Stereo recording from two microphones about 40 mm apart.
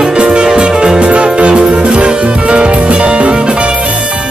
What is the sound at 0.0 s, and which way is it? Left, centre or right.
Music, right.